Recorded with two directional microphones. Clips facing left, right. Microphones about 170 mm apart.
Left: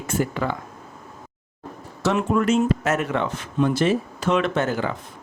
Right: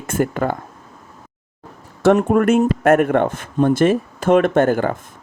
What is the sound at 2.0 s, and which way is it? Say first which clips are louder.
Speech: right 7 dB; 55° right (ahead or behind).